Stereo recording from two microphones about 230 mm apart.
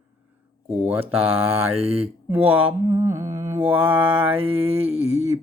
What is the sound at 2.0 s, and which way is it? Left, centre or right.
Mantra, centre.